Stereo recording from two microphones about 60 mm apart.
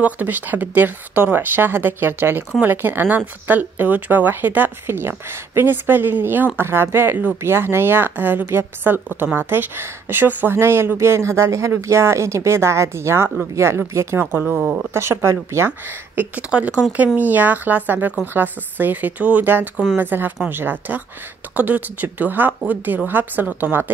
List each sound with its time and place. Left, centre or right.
0.0 s speech: right
14.3 s speech: right
15.0 s speech: right
16.3 s speech: right